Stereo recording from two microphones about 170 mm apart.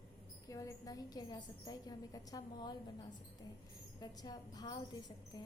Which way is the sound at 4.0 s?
20° left (ahead or behind).